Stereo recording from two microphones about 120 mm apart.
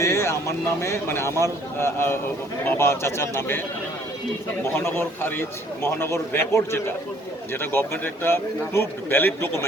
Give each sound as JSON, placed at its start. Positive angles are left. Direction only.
{"t": 0.0, "sound": "a man's voice", "side_deg": 25}
{"t": 4.7, "sound": "a man's voice", "side_deg": 20}